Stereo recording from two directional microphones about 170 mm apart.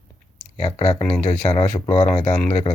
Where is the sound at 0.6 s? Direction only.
30° left (ahead or behind).